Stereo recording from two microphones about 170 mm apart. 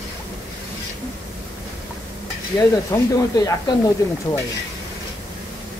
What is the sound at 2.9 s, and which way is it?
Speech, 20° left (ahead or behind).